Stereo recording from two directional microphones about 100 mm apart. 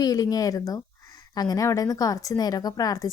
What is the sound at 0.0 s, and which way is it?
Speech, 35° left (ahead or behind).